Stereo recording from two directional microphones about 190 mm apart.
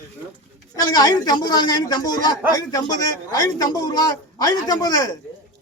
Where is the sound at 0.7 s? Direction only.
20° left (ahead or behind).